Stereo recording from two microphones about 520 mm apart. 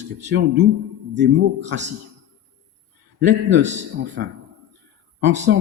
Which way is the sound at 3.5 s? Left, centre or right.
Centre.